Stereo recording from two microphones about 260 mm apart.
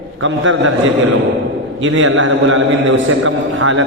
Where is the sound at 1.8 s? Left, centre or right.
Right.